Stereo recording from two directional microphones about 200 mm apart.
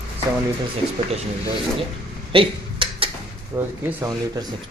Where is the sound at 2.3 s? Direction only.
25° right (ahead or behind).